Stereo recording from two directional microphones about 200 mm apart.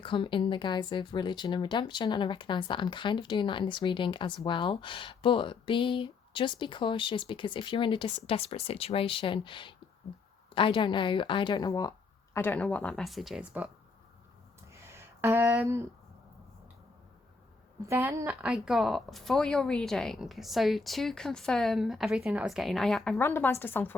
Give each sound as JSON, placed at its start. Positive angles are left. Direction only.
{"t": 0.0, "sound": "speech", "side_deg": 25}
{"t": 14.7, "sound": "a sound", "side_deg": -15}
{"t": 17.8, "sound": "speech", "side_deg": -15}